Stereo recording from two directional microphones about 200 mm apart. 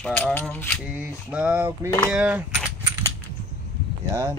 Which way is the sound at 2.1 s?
5° right (ahead or behind).